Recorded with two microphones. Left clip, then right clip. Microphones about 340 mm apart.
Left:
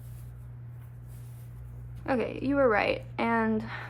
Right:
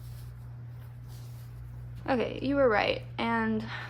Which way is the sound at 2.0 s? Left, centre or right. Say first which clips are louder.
Even; centre.